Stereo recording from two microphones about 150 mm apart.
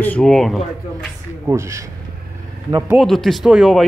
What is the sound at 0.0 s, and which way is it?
Speech, 5° left (ahead or behind).